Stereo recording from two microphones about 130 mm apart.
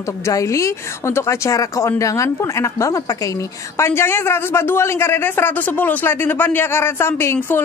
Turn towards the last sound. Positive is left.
turn(degrees=15)  # may be behind; listen again after turning